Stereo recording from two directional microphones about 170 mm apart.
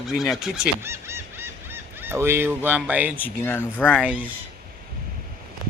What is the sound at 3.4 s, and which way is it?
Speech, 10° left (ahead or behind).